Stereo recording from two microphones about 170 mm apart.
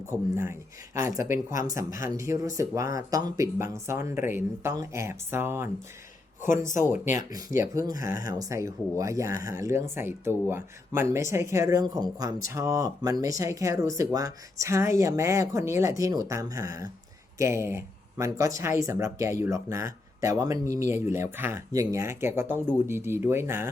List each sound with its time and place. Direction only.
0.1 s speech: 15° right (ahead or behind)
7.0 s speech: 45° left (ahead or behind)
7.6 s speech: 20° right (ahead or behind)
7.9 s speech: 55° left (ahead or behind)
8.2 s speech: 20° right (ahead or behind)